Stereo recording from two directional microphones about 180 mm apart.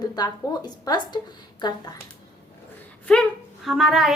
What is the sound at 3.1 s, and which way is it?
A woman's voice, centre (ahead or behind).